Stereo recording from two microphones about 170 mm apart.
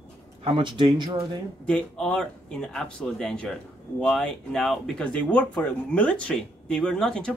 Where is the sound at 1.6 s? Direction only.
5° left (ahead or behind).